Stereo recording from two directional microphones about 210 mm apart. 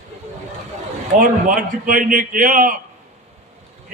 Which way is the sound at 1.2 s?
40° right (ahead or behind).